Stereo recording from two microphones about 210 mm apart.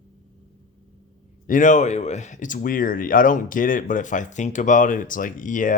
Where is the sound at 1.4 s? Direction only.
40° left (ahead or behind).